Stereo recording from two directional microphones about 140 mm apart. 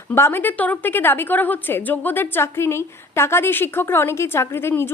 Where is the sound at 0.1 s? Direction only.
15° left (ahead or behind).